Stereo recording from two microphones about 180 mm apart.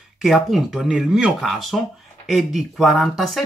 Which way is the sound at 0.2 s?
Centre (ahead or behind).